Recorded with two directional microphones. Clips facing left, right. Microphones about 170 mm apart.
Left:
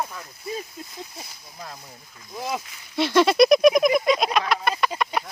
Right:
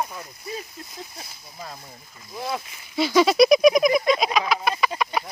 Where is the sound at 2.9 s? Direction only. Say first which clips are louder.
Even; centre (ahead or behind).